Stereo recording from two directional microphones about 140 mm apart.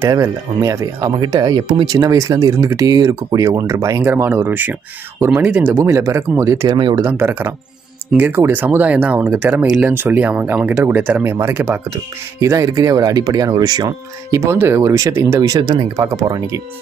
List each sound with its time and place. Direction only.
0.1 s speech: 25° right (ahead or behind); by 5.7 s 10° right (ahead or behind)
5.7 s speech: 20° right (ahead or behind)